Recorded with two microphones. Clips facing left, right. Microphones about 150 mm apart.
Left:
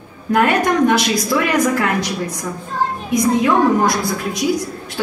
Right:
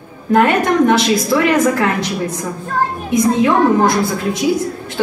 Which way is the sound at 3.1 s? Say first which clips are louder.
Right 2 dB; 25° right (ahead or behind).